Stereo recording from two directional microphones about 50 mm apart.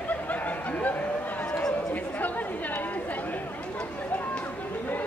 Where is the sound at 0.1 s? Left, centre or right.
Left.